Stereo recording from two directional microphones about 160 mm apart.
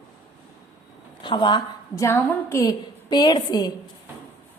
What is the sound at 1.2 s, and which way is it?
Speech, 30° left (ahead or behind).